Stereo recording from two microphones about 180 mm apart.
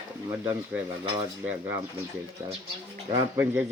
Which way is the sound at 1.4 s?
5° right (ahead or behind).